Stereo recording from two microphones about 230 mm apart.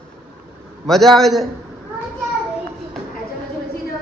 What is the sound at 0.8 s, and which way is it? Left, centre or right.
Speech, centre.